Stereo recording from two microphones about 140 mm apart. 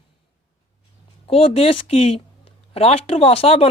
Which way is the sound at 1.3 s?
45° left (ahead or behind).